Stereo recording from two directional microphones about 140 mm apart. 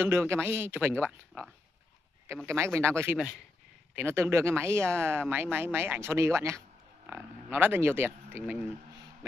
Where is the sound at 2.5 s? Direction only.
20° right (ahead or behind).